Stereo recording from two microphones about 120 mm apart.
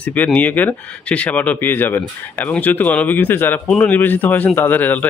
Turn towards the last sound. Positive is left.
turn(degrees=15)  # may be behind; listen again after turning